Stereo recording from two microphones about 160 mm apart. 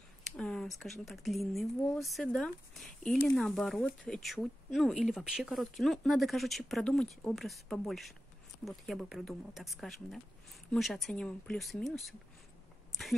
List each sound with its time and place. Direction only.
0.2 s speech: 5° left (ahead or behind)